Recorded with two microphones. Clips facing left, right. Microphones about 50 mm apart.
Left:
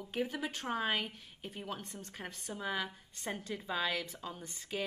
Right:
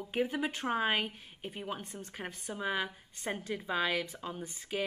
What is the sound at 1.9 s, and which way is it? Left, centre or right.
A woman's voice, right.